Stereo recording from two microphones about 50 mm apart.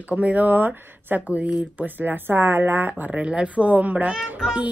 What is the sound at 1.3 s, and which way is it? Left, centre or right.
A woman's voice, right.